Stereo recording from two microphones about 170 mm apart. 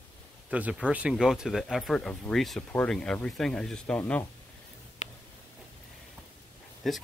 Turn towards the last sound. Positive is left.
turn(degrees=0)  # may be behind; listen again after turning